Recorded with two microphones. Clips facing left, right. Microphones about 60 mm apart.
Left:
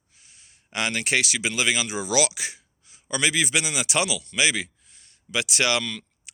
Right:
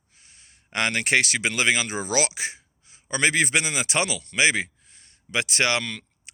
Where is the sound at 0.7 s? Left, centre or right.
Right.